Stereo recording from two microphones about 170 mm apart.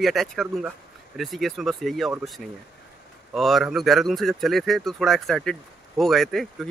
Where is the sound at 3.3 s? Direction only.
Centre (ahead or behind).